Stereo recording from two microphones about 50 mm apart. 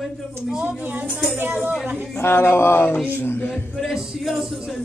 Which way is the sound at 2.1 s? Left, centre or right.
Left.